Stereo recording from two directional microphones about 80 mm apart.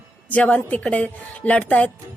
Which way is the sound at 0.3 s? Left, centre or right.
Centre.